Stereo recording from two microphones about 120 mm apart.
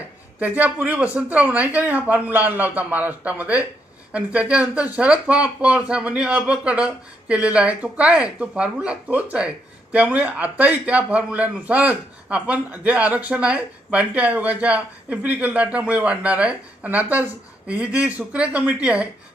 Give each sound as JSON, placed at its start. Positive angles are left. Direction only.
{"t": 0.3, "sound": "speech", "side_deg": -15}